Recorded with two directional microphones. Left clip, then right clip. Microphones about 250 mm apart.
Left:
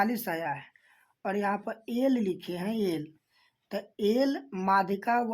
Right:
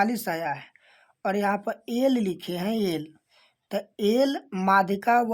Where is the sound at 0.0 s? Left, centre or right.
Right.